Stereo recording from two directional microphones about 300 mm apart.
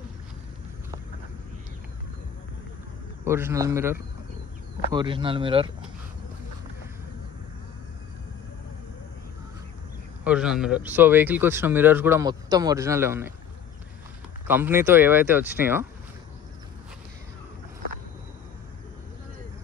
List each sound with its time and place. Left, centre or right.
3.3 s speech: centre
10.2 s speech: centre
14.5 s speech: centre